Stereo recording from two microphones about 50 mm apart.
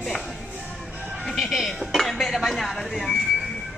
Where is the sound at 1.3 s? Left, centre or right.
Centre.